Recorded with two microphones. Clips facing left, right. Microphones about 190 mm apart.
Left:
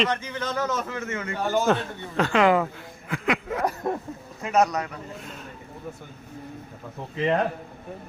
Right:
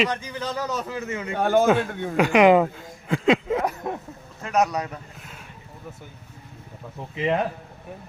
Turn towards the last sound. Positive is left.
turn(degrees=-10)  # may be behind; listen again after turning